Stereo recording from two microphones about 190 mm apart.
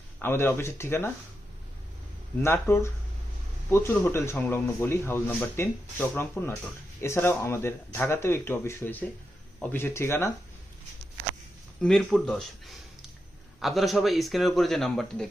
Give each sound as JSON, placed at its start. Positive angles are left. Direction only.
{"t": 0.2, "sound": "a man's voice", "side_deg": 15}
{"t": 2.4, "sound": "a man's voice", "side_deg": 15}
{"t": 11.8, "sound": "a man's voice", "side_deg": 5}